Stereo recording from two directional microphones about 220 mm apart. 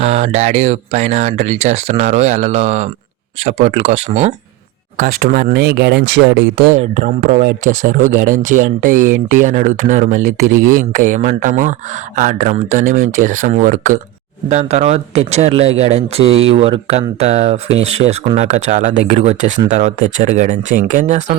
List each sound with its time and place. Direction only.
0.0 s speech: 30° right (ahead or behind); by 6.7 s 55° right (ahead or behind)
6.7 s speech: 30° right (ahead or behind)